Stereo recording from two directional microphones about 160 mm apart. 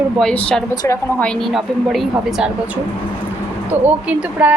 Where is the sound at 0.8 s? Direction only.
15° left (ahead or behind).